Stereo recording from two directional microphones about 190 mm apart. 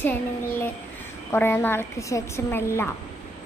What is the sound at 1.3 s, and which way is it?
A woman's voice, 10° left (ahead or behind).